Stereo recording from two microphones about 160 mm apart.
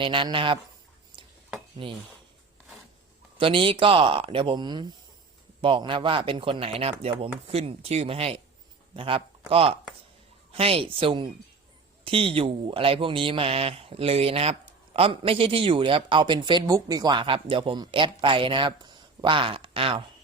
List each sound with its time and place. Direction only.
0.0 s speech: 30° right (ahead or behind)
3.3 s speech: 35° right (ahead or behind)